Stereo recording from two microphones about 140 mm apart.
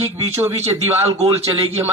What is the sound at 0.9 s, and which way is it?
Speech, 50° right (ahead or behind).